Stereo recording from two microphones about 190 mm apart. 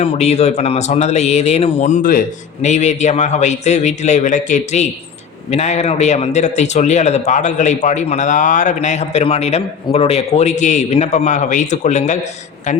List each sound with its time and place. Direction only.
0.0 s a man's voice: 35° left (ahead or behind)